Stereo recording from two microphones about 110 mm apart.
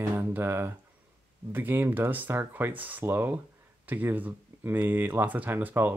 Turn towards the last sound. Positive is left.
turn(degrees=-15)  # may be behind; listen again after turning